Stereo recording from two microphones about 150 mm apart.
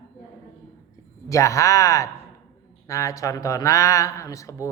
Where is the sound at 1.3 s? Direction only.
20° left (ahead or behind).